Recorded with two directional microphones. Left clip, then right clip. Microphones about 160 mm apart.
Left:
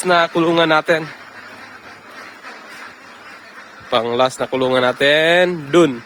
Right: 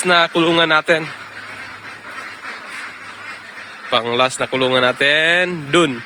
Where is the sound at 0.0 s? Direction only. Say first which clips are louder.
Right 1 dB; 15° left (ahead or behind).